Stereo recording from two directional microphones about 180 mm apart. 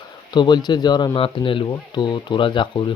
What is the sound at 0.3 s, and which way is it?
Speech, 25° left (ahead or behind).